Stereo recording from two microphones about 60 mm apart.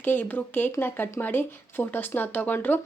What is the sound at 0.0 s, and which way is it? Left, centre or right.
A woman's voice, left.